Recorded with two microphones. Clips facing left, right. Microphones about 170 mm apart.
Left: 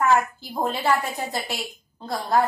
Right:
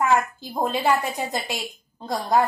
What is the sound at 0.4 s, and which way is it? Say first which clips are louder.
A woman's voice: right 2 dB; 15° right (ahead or behind).